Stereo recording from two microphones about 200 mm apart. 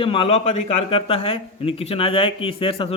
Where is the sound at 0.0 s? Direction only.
25° left (ahead or behind).